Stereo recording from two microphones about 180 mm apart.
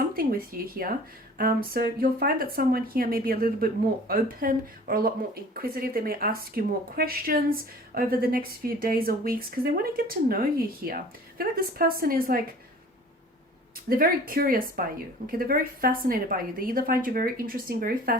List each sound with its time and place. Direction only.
0.0 s a woman's voice: 55° right (ahead or behind)
13.9 s a woman's voice: 55° right (ahead or behind)